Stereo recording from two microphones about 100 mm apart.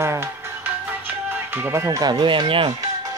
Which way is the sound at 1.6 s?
20° right (ahead or behind).